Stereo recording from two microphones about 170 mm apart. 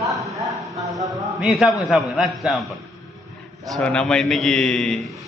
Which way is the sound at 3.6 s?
5° left (ahead or behind).